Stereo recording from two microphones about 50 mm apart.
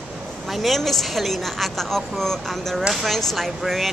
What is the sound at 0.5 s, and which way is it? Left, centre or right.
Speech, centre.